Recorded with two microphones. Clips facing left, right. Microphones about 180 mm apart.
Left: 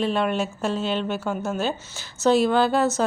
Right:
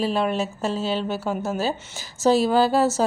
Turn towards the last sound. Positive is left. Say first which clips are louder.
# right 1 dB
turn(degrees=-5)  # may be behind; listen again after turning